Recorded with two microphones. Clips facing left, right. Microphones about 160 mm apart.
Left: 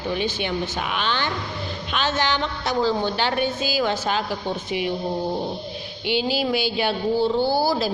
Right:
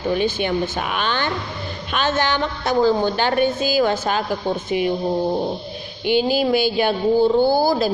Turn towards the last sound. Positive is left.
turn(degrees=-50)  # may be behind; listen again after turning